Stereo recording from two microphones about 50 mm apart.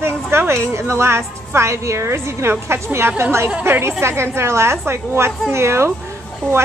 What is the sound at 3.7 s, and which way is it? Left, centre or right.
A woman's voice, right.